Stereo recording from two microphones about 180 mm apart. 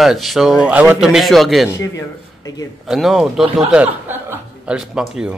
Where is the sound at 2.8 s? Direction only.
Centre (ahead or behind).